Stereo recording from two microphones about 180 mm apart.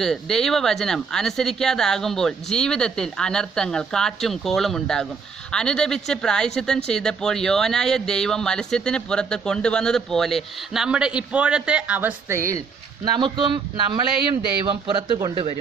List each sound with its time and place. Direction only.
0.0 s speech: centre (ahead or behind); by 13.5 s 25° right (ahead or behind)
14.9 s a man's voice: 25° right (ahead or behind)